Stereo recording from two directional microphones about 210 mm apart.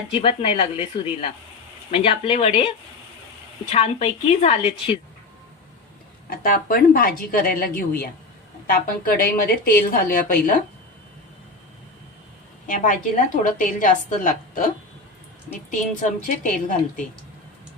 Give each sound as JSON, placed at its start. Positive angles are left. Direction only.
{"t": 0.1, "sound": "a woman's voice", "side_deg": 25}
{"t": 6.3, "sound": "a woman's voice", "side_deg": 45}
{"t": 12.6, "sound": "a woman's voice", "side_deg": 35}
{"t": 15.7, "sound": "a woman's voice", "side_deg": 35}